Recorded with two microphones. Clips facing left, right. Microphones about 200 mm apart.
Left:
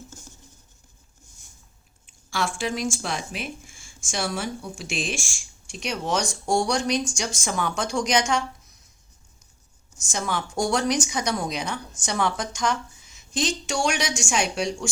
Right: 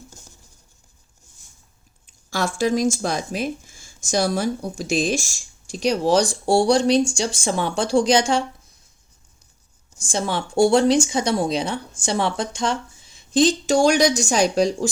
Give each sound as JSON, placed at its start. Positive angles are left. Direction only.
{"t": 2.0, "sound": "speech", "side_deg": -40}
{"t": 10.0, "sound": "speech", "side_deg": -30}